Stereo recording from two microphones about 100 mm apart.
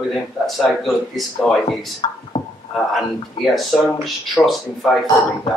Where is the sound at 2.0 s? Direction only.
45° left (ahead or behind).